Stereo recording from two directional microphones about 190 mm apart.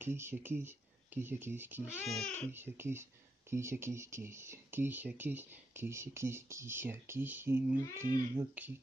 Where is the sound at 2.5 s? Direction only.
10° right (ahead or behind).